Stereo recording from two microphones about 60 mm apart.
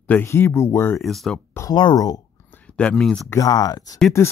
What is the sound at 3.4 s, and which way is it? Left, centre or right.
Speech, left.